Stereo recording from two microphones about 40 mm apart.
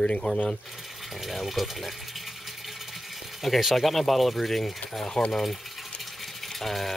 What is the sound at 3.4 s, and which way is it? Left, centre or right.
Speech, centre.